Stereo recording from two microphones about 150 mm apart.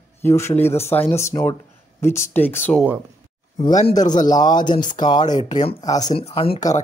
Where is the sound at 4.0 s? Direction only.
55° left (ahead or behind).